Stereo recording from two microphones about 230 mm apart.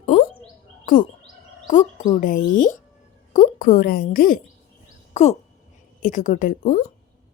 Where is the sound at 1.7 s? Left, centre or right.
Left.